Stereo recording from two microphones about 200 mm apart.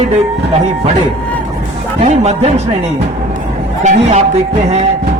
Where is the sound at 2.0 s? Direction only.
35° right (ahead or behind).